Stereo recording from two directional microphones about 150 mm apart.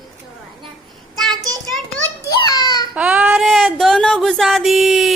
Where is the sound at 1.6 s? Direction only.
Centre (ahead or behind).